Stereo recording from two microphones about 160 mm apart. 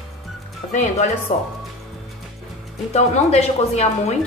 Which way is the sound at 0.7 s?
45° left (ahead or behind).